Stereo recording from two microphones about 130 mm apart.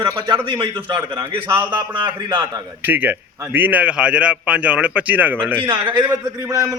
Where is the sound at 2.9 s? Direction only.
15° right (ahead or behind).